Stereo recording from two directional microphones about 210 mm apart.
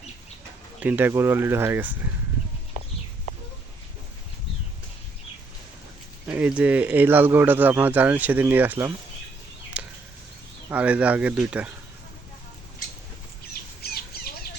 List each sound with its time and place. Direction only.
0.8 s speech: 10° right (ahead or behind)
6.2 s speech: 5° right (ahead or behind)
9.7 s a sound: 5° right (ahead or behind)
10.7 s speech: 5° right (ahead or behind)
13.5 s squawk: 45° left (ahead or behind)